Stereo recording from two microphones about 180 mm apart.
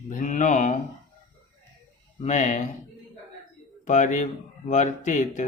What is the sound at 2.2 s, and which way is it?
Speech, 40° left (ahead or behind).